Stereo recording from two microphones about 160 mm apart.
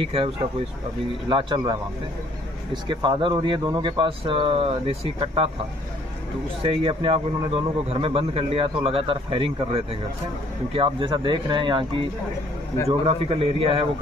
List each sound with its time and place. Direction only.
0.0 s a man's voice: 35° right (ahead or behind)
1.3 s a man's voice: 30° right (ahead or behind)
6.6 s a man's voice: 35° right (ahead or behind)
12.8 s a man's voice: 35° right (ahead or behind)